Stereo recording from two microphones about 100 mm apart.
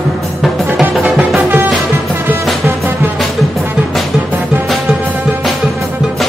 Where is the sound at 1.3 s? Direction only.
20° right (ahead or behind).